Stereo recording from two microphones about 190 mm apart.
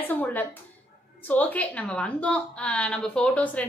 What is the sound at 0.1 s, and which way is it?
A woman's voice, 10° left (ahead or behind).